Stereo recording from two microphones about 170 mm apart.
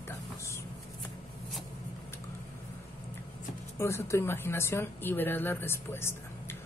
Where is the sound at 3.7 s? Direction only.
15° left (ahead or behind).